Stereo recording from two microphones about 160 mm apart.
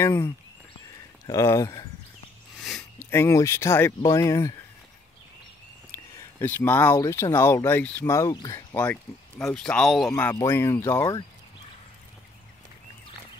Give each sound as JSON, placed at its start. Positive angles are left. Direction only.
{"t": 0.0, "sound": "speech", "side_deg": 15}
{"t": 3.0, "sound": "speech", "side_deg": 15}
{"t": 6.1, "sound": "speech", "side_deg": 10}
{"t": 10.1, "sound": "speech", "side_deg": 15}